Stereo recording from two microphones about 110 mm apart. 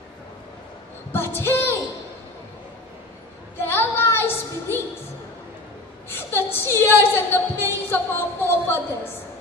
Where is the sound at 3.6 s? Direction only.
20° left (ahead or behind).